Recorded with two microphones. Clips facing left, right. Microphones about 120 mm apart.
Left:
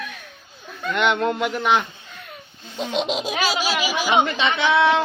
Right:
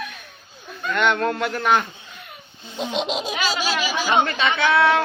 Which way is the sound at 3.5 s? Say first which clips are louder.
Left 1 dB; 10° left (ahead or behind).